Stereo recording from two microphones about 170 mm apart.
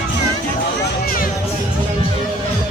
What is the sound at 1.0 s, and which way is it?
Music, 60° left (ahead or behind).